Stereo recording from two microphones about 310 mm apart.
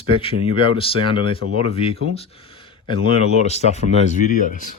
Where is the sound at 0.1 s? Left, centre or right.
Centre.